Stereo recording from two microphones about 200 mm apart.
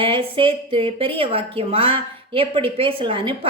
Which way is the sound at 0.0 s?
25° right (ahead or behind).